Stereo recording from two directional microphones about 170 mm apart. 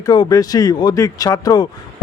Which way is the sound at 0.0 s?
20° left (ahead or behind).